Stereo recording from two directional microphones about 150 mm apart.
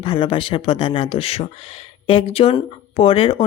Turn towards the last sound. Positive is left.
turn(degrees=40)  # may be behind; listen again after turning